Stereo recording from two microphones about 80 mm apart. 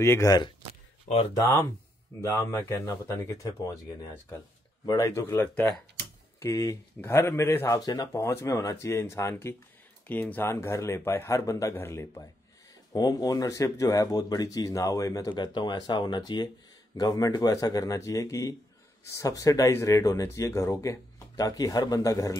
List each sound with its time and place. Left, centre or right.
0.0 s speech: left
1.3 s speech: left
5.0 s speech: left
6.4 s speech: left
8.2 s speech: left
12.9 s speech: left
15.3 s speech: left
16.9 s speech: left